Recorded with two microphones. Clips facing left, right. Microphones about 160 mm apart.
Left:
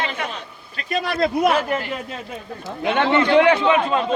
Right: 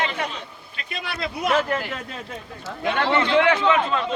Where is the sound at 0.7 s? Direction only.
40° left (ahead or behind).